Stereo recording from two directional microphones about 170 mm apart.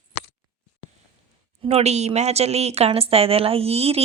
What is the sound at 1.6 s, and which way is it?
Speech, 40° right (ahead or behind).